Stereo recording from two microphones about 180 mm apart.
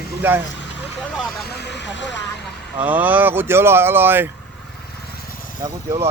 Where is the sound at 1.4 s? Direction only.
65° left (ahead or behind).